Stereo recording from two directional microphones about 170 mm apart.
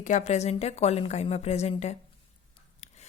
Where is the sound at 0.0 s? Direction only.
45° left (ahead or behind).